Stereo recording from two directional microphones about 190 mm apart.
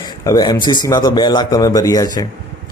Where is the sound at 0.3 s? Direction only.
20° left (ahead or behind).